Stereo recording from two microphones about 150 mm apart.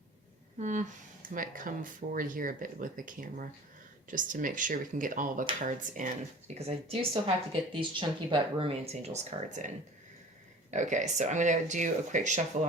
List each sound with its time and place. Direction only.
0.6 s speech: 55° right (ahead or behind)
10.7 s speech: 55° right (ahead or behind)